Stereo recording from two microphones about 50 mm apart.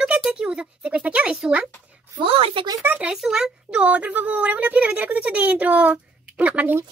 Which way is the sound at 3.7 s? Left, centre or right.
Right.